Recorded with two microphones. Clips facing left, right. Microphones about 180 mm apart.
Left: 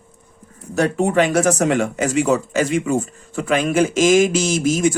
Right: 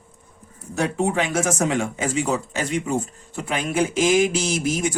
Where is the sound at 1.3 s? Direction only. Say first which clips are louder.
Left 5 dB; 65° left (ahead or behind).